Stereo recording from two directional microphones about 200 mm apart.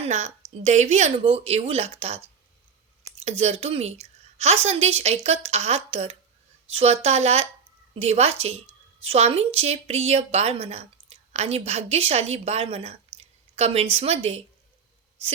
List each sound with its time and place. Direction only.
0.0 s a woman's voice: 35° right (ahead or behind)